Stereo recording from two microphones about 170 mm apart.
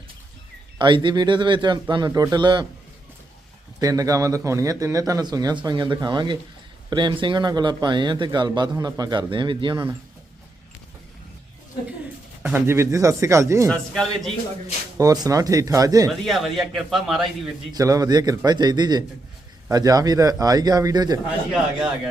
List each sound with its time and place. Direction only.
0.8 s speech: 25° right (ahead or behind)
3.8 s speech: 20° right (ahead or behind)
12.4 s speech: 10° right (ahead or behind)
13.7 s a man's voice: 5° left (ahead or behind)
14.9 s speech: 20° right (ahead or behind)
16.0 s a man's voice: centre (ahead or behind)
17.7 s speech: 20° right (ahead or behind)
21.5 s a man's voice: 5° right (ahead or behind)